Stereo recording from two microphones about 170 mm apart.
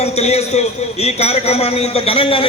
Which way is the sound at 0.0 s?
40° left (ahead or behind).